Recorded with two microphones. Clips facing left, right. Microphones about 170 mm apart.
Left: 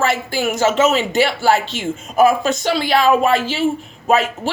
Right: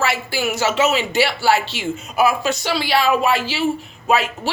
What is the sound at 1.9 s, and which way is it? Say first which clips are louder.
A woman's voice: left 5 dB; 45° left (ahead or behind).